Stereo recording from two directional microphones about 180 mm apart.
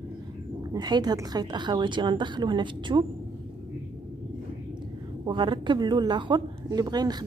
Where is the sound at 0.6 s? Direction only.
20° right (ahead or behind).